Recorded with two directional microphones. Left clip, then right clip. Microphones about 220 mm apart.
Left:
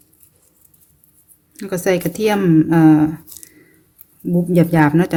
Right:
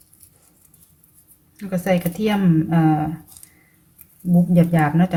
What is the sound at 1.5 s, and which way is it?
A woman's voice, 50° left (ahead or behind).